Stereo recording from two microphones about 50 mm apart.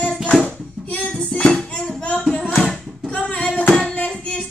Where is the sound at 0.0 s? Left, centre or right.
Left.